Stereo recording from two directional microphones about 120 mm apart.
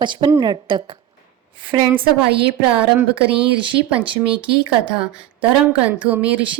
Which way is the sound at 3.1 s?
45° right (ahead or behind).